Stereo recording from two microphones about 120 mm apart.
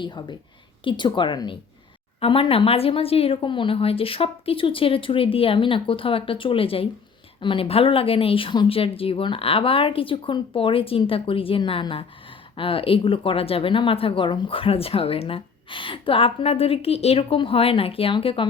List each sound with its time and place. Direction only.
0.0 s a woman's voice: 40° left (ahead or behind)